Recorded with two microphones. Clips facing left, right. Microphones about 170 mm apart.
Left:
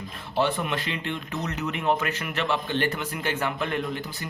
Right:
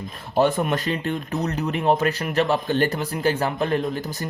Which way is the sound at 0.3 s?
45° right (ahead or behind).